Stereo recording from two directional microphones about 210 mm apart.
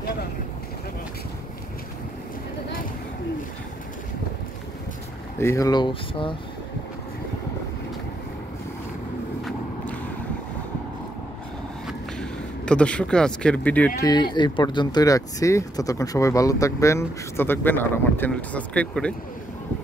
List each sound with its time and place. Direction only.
5.4 s speech: 15° left (ahead or behind)
12.2 s speech: 5° left (ahead or behind)
14.3 s speech: 20° left (ahead or behind); by 19.1 s 5° left (ahead or behind)